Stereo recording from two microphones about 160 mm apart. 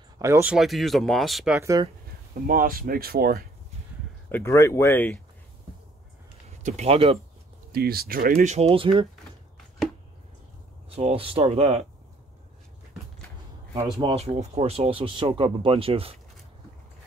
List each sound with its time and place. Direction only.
0.2 s speech: 15° right (ahead or behind)
0.6 s speech: centre (ahead or behind)
1.6 s speech: 20° right (ahead or behind)
2.4 s speech: 60° right (ahead or behind)
4.3 s speech: 15° left (ahead or behind)
6.6 s speech: 40° right (ahead or behind)
7.7 s speech: 75° right (ahead or behind)
8.5 s speech: 40° right (ahead or behind)
11.0 s speech: 35° right (ahead or behind)
14.0 s speech: 40° right (ahead or behind)